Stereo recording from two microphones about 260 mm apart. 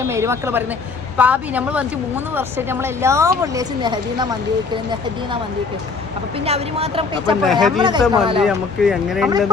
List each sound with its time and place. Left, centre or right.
0.1 s a woman's voice: centre
6.3 s speech: right
7.4 s speech: centre
7.8 s a woman's voice: centre
8.4 s speech: centre